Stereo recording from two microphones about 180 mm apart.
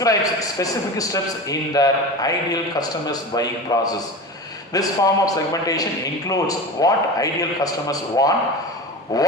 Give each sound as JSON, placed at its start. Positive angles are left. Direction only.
{"t": 0.0, "sound": "a man's voice", "side_deg": 20}